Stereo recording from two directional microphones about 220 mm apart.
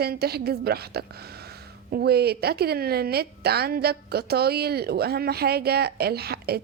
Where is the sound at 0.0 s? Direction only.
45° right (ahead or behind).